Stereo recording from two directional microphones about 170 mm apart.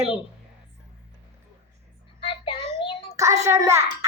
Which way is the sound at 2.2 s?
30° left (ahead or behind).